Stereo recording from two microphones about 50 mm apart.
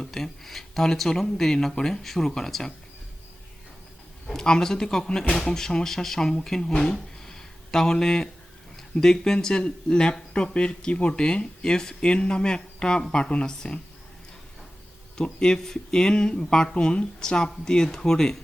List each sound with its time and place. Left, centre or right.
0.0 s speech: centre
4.3 s speech: centre
15.2 s speech: centre